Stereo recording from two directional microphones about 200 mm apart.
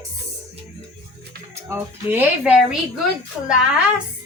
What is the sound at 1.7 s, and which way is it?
A woman's voice, 10° right (ahead or behind).